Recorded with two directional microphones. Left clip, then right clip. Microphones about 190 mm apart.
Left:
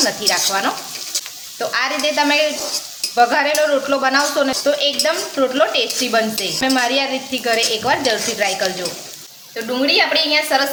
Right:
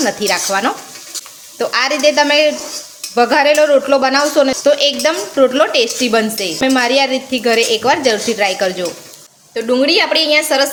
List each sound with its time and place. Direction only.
0.2 s speech: 50° right (ahead or behind)
9.7 s a woman's voice: 55° right (ahead or behind)